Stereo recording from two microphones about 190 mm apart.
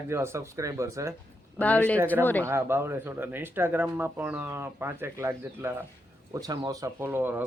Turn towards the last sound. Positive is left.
turn(degrees=-10)  # may be behind; listen again after turning